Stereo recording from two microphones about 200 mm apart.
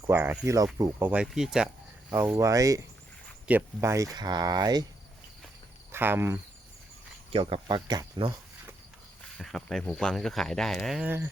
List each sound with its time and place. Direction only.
0.1 s speech: 10° right (ahead or behind)
5.9 s speech: 10° right (ahead or behind)
7.3 s speech: 25° right (ahead or behind)
9.4 s speech: centre (ahead or behind)